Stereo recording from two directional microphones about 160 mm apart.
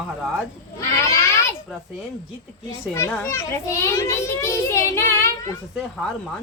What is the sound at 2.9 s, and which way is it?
A child's voice, 15° left (ahead or behind).